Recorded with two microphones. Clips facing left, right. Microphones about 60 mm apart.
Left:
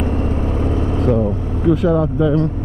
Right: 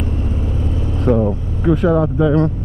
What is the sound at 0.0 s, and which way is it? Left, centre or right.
Vehicle, left.